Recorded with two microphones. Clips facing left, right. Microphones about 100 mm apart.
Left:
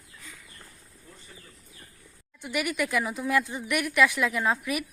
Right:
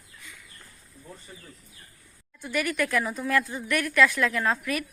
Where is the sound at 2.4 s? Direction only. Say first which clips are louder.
Right 1 dB; 15° left (ahead or behind).